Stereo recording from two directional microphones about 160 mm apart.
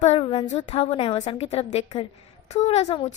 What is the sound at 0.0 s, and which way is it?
A woman's voice, 40° left (ahead or behind).